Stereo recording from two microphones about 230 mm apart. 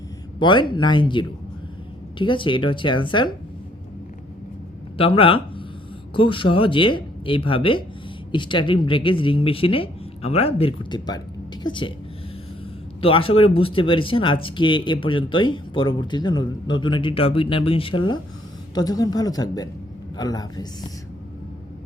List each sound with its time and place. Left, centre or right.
0.3 s speech: centre
4.9 s speech: left
13.0 s speech: left